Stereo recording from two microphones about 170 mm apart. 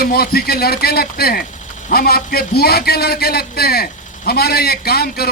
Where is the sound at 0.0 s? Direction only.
65° left (ahead or behind).